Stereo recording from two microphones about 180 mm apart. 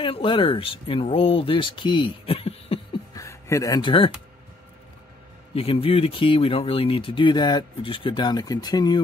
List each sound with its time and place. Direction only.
0.0 s speech: 30° left (ahead or behind)
3.2 s a sound: 15° left (ahead or behind)
5.5 s speech: 30° left (ahead or behind)